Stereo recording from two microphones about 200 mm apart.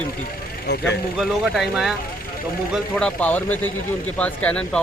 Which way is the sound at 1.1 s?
Centre (ahead or behind).